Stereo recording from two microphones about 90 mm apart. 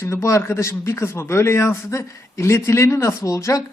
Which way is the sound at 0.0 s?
30° left (ahead or behind).